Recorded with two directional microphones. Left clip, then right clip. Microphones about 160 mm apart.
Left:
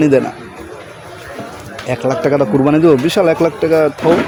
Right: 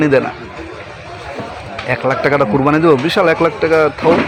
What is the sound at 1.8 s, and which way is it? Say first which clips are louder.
Speech: right 1 dB; 55° left (ahead or behind).